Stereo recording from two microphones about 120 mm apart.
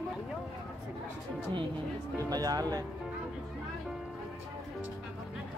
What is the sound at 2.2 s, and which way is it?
Speech, 30° right (ahead or behind).